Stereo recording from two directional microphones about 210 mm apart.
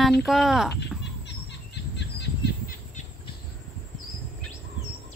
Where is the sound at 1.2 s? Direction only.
55° left (ahead or behind).